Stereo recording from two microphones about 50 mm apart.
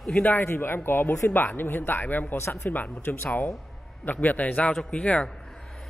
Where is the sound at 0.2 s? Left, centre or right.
Left.